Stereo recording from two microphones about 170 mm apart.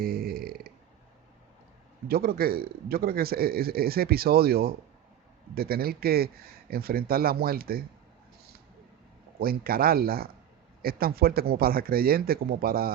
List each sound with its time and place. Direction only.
0.0 s burping: 60° right (ahead or behind)
2.0 s a man's voice: 65° right (ahead or behind)
9.4 s a man's voice: 60° right (ahead or behind)